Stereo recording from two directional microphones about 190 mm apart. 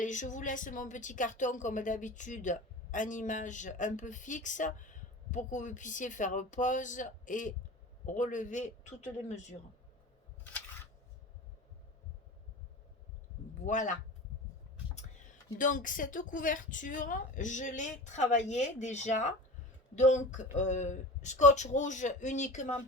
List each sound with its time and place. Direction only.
0.0 s a woman's voice: 40° left (ahead or behind)
13.6 s speech: 40° left (ahead or behind)
15.5 s a woman's voice: 45° left (ahead or behind)